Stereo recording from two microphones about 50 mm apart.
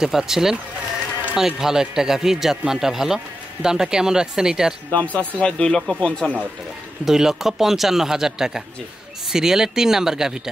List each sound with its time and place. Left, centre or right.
0.0 s a man's voice: centre
4.9 s speech: left
5.8 s speech: centre
6.0 s speech: left
7.1 s a man's voice: centre